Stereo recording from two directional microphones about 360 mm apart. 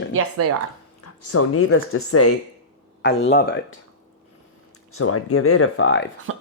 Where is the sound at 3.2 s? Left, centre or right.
Left.